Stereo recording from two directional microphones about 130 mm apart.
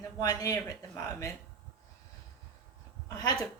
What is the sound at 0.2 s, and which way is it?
Speech, 25° left (ahead or behind).